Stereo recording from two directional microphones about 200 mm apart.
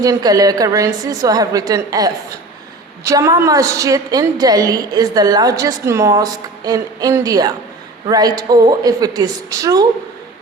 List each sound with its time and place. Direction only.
0.0 s a woman's voice: 20° right (ahead or behind)